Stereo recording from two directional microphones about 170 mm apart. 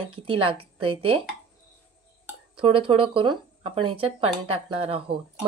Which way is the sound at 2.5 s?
30° right (ahead or behind).